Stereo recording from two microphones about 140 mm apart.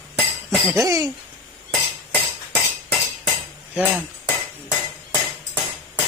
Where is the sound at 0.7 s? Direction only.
25° right (ahead or behind).